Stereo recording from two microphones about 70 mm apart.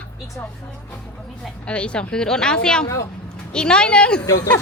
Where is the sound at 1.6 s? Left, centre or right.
Centre.